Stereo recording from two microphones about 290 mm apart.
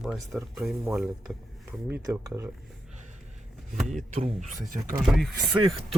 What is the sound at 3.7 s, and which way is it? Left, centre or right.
Speech, centre.